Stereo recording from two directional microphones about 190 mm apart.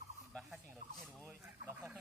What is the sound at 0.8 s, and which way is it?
Speech, 45° right (ahead or behind).